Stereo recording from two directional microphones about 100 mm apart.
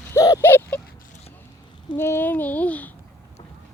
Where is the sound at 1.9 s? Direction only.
20° left (ahead or behind).